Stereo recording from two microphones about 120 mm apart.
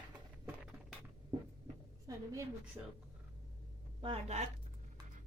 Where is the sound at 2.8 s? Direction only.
20° right (ahead or behind).